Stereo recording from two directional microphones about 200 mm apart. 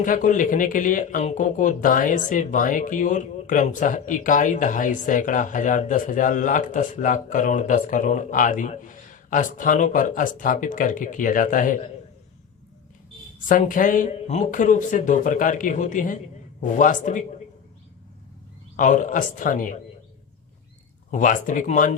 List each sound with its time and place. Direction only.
0.0 s speech: 40° left (ahead or behind)
13.5 s speech: 40° left (ahead or behind)
18.8 s speech: 40° left (ahead or behind)
21.1 s speech: 40° left (ahead or behind)